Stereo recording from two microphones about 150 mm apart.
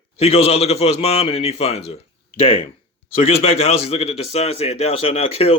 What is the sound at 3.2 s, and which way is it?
Speech, 40° left (ahead or behind).